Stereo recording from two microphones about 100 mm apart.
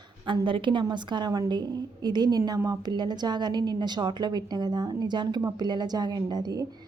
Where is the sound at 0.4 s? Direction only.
55° right (ahead or behind).